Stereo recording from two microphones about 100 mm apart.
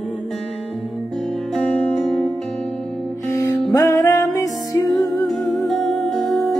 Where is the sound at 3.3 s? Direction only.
30° left (ahead or behind).